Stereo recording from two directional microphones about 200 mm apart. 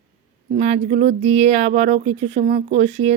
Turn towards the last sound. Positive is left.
turn(degrees=-35)  # may be behind; listen again after turning